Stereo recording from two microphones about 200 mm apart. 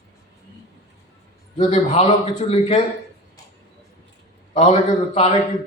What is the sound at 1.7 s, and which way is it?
Speech, 35° left (ahead or behind).